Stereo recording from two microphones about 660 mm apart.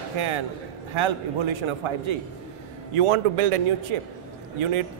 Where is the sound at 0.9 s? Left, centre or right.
Right.